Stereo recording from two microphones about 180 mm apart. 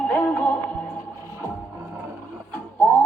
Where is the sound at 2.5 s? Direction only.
10° left (ahead or behind).